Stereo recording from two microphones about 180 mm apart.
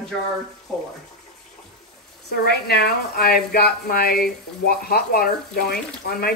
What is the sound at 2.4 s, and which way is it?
Speech, 60° left (ahead or behind).